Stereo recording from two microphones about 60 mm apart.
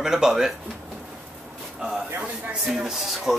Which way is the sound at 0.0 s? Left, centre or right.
Centre.